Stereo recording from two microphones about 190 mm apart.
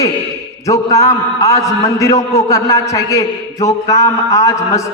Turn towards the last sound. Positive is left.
turn(degrees=15)  # may be behind; listen again after turning